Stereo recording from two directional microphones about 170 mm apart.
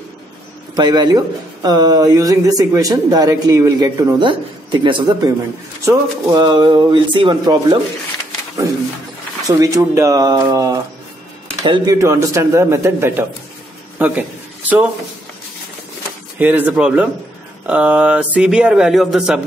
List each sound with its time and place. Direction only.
0.7 s speech: 25° right (ahead or behind)
4.2 s speech: 30° right (ahead or behind)
9.6 s a man's voice: 20° right (ahead or behind)
16.3 s speech: 10° right (ahead or behind)